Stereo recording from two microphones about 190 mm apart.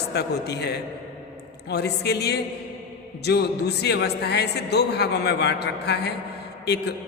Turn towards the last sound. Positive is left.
turn(degrees=60)  # may be behind; listen again after turning